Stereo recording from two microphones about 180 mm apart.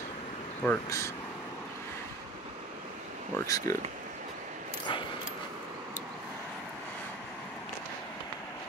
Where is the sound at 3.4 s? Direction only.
20° left (ahead or behind).